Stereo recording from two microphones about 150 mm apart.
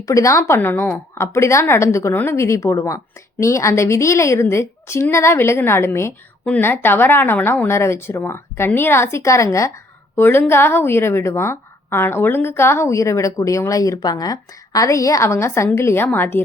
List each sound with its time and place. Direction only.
0.0 s a woman's voice: 20° left (ahead or behind)